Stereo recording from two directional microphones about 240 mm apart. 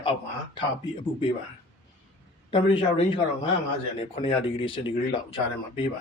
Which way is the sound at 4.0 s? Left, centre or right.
Left.